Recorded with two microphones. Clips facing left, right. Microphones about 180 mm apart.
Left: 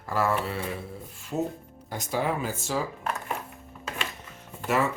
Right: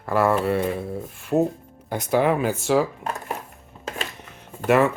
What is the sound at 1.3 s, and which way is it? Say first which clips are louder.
Speech: right 9 dB; 80° right.